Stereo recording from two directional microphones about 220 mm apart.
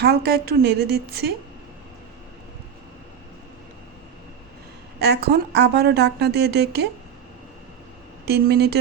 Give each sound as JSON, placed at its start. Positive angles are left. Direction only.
{"t": 0.0, "sound": "speech", "side_deg": -45}
{"t": 4.9, "sound": "speech", "side_deg": -50}
{"t": 8.2, "sound": "speech", "side_deg": -45}